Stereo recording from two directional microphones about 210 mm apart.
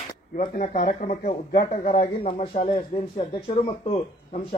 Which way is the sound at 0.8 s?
40° left (ahead or behind).